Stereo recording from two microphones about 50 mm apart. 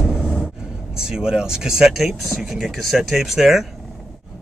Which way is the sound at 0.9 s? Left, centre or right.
Centre.